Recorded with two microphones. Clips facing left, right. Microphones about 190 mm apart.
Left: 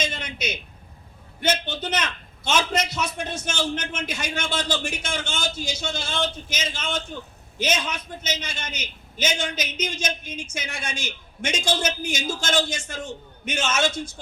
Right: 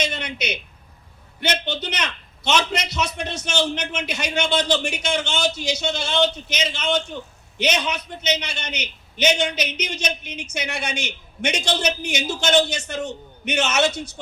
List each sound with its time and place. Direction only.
0.0 s a man's voice: 65° right (ahead or behind)